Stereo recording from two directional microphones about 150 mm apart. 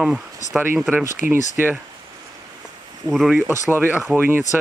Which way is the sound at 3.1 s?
Centre (ahead or behind).